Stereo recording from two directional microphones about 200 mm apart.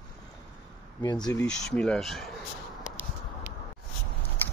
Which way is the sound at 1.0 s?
20° left (ahead or behind).